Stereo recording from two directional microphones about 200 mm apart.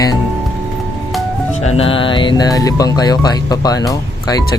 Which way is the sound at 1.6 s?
30° left (ahead or behind).